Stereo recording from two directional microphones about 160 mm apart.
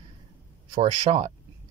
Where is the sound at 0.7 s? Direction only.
40° right (ahead or behind).